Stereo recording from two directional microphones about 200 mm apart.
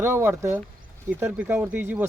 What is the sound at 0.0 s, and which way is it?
Speech, 10° right (ahead or behind).